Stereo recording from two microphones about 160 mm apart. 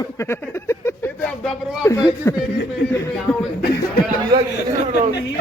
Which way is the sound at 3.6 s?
75° left (ahead or behind).